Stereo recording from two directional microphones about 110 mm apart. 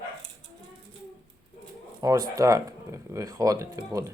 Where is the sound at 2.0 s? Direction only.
35° right (ahead or behind).